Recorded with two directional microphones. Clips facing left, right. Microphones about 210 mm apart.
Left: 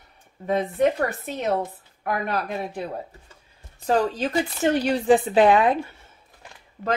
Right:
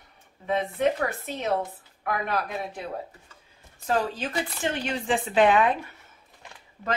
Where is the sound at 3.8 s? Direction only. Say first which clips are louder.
Left 5 dB; 35° left (ahead or behind).